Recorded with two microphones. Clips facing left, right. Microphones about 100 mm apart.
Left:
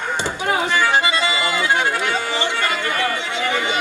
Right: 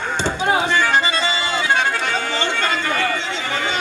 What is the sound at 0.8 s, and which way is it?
Accordion, 15° left (ahead or behind).